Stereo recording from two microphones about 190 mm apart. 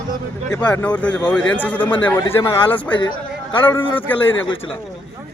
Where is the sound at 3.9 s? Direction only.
10° left (ahead or behind).